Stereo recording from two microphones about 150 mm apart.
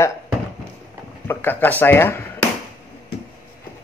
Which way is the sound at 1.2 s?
15° left (ahead or behind).